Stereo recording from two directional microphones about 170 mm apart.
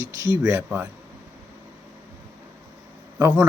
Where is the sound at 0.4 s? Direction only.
10° right (ahead or behind).